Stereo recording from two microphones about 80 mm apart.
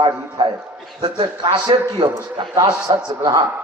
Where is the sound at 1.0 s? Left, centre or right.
Right.